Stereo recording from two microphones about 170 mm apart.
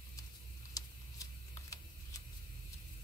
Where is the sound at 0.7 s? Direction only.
20° left (ahead or behind).